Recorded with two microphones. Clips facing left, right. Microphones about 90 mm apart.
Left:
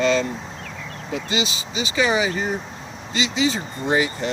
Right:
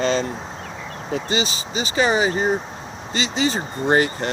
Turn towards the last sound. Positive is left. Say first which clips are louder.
# right 3 dB
turn(degrees=-45)  # may be behind; listen again after turning